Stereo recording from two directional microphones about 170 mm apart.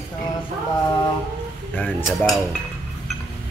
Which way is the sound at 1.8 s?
10° left (ahead or behind).